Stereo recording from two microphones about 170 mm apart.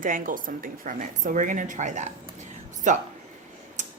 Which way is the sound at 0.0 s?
55° right (ahead or behind).